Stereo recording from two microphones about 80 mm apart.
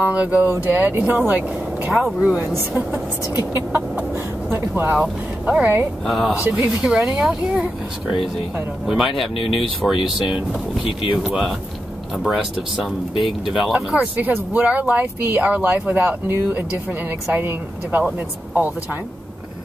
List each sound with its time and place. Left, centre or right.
0.0 s speech: centre
1.9 s speech: centre
2.4 s speech: right
6.0 s speech: centre
6.3 s speech: centre
8.8 s speech: centre
13.2 s speech: centre
13.9 s speech: right